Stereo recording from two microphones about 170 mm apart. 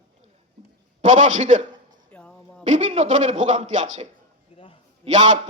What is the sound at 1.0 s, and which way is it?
Speech, 45° right (ahead or behind).